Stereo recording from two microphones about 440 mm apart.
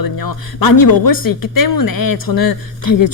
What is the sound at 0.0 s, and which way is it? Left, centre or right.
Speech, left.